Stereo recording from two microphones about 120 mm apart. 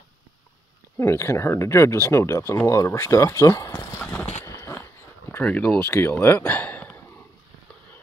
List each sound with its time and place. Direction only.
0.9 s speech: 20° left (ahead or behind)
4.4 s dog: 20° left (ahead or behind)
5.3 s speech: 15° left (ahead or behind)